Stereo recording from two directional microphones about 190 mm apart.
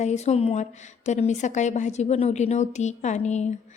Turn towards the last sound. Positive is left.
turn(degrees=35)  # may be behind; listen again after turning